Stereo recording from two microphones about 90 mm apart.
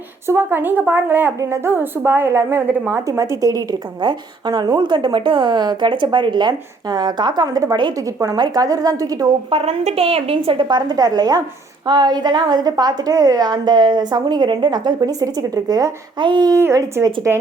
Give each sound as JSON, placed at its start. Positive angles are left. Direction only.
{"t": 0.3, "sound": "a woman's voice", "side_deg": -30}
{"t": 4.0, "sound": "a woman's voice", "side_deg": -55}
{"t": 7.9, "sound": "a woman's voice", "side_deg": -40}
{"t": 9.5, "sound": "a woman's voice", "side_deg": -90}
{"t": 16.2, "sound": "a woman's voice", "side_deg": -60}
{"t": 16.6, "sound": "a woman's voice", "side_deg": -30}